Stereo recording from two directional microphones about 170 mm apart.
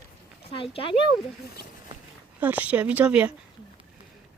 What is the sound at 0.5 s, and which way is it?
Speech, 35° left (ahead or behind).